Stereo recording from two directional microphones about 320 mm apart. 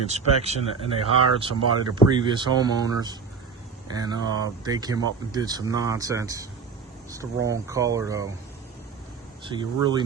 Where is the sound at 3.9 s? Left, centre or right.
Centre.